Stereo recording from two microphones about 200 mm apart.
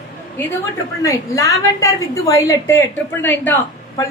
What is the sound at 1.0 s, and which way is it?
A woman's voice, 15° left (ahead or behind).